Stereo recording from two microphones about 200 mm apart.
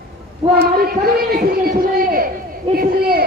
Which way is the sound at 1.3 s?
45° right (ahead or behind).